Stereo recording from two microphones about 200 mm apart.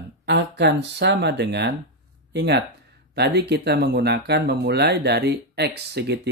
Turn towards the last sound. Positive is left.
turn(degrees=-55)  # may be behind; listen again after turning